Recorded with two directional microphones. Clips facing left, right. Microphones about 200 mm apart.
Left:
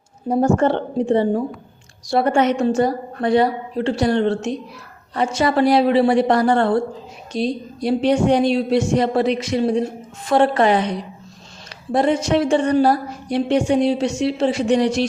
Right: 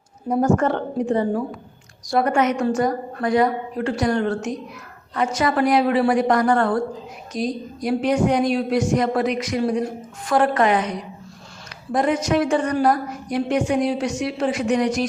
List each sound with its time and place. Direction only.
0.3 s a woman's voice: 25° left (ahead or behind)